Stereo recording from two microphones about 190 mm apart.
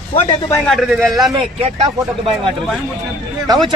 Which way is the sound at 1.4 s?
30° right (ahead or behind).